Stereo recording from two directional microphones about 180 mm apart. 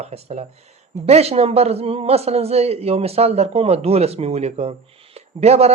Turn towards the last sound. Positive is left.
turn(degrees=-35)  # may be behind; listen again after turning